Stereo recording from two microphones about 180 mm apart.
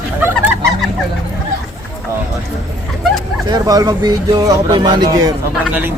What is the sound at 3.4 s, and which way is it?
Speech, 20° right (ahead or behind).